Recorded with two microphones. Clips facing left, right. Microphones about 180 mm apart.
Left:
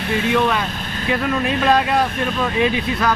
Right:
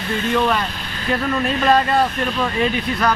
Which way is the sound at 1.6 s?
Centre (ahead or behind).